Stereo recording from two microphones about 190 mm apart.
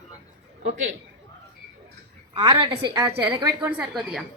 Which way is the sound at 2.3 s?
25° right (ahead or behind).